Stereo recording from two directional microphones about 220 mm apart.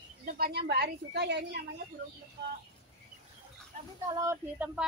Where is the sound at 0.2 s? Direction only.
40° right (ahead or behind).